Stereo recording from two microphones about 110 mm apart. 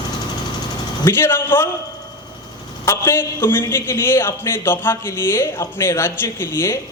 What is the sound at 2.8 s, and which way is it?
A man's voice, 20° left (ahead or behind).